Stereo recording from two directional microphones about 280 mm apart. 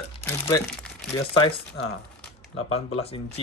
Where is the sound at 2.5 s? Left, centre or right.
Left.